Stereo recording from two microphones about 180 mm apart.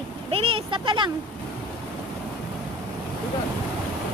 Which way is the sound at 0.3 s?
30° right (ahead or behind).